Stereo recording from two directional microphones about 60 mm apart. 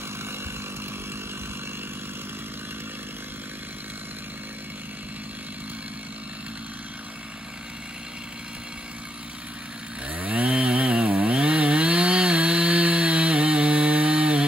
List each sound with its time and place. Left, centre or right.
10.1 s chainsaw: right